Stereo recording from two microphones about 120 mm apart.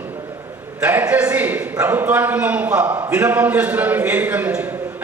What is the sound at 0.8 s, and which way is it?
A man's voice, 10° right (ahead or behind).